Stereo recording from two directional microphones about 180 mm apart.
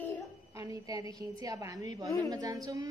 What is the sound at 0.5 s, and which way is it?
A woman's voice, 15° right (ahead or behind).